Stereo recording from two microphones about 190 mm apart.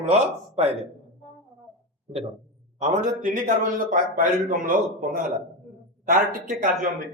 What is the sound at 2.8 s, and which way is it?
A man's voice, 45° right (ahead or behind).